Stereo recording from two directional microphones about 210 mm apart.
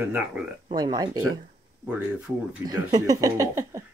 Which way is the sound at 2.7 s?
15° right (ahead or behind).